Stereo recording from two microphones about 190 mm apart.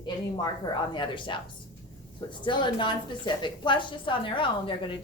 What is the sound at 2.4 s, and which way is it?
A woman's voice, 25° left (ahead or behind).